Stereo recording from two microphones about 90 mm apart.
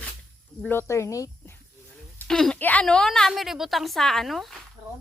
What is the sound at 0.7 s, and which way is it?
Speech, 30° left (ahead or behind).